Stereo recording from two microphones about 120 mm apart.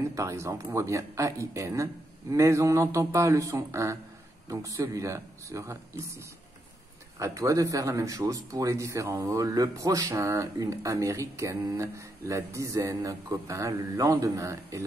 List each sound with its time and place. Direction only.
0.1 s speech: 25° right (ahead or behind)